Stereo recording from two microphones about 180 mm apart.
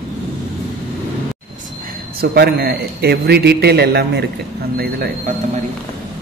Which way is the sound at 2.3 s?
60° right (ahead or behind).